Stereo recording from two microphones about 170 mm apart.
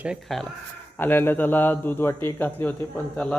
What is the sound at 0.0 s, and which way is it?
Speech, centre (ahead or behind).